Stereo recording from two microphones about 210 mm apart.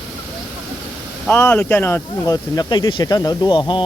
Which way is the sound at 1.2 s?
10° left (ahead or behind).